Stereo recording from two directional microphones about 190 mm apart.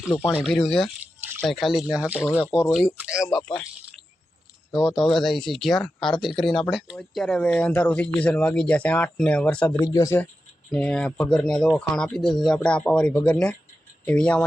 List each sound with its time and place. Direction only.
0.1 s speech: 5° left (ahead or behind)
4.7 s speech: centre (ahead or behind)
9.8 s speech: 15° left (ahead or behind)